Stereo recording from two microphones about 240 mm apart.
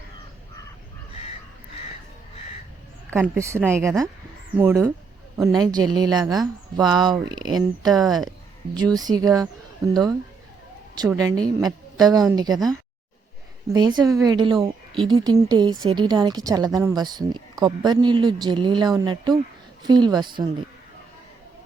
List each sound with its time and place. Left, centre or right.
3.1 s a woman's voice: centre
8.0 s speech: centre
9.0 s a woman's voice: centre
11.2 s a woman's voice: centre
13.7 s a woman's voice: centre